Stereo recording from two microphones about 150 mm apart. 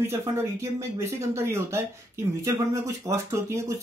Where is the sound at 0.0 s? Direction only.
20° right (ahead or behind).